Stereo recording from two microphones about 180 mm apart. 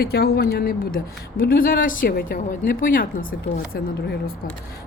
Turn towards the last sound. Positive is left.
turn(degrees=55)  # may be behind; listen again after turning